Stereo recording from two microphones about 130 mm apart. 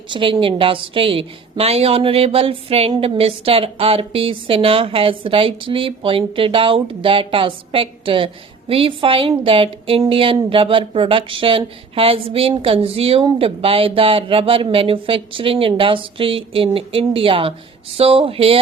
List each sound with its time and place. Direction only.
0.1 s a woman's voice: 40° right (ahead or behind)